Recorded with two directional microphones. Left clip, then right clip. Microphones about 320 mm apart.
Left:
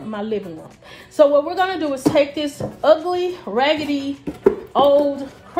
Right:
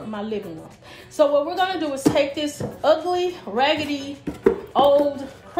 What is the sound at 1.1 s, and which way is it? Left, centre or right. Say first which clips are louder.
A woman's voice: left 4 dB; left.